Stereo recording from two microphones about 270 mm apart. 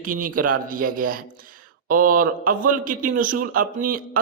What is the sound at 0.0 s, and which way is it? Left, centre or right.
A man's voice, right.